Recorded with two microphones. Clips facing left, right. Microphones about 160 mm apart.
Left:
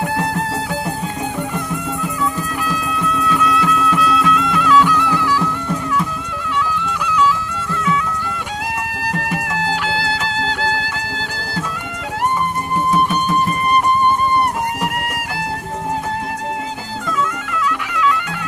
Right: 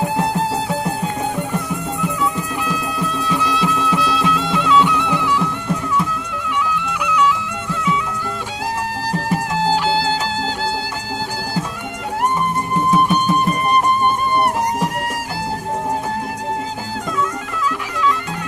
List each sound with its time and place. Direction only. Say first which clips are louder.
0.0 s music: right 1 dB; 25° right (ahead or behind)
2.6 s music: left 3 dB; 30° right (ahead or behind)
6.8 s music: even; 15° right (ahead or behind)
9.1 s music: right 3 dB; 35° right (ahead or behind)
17.7 s music: left 1 dB; 35° right (ahead or behind)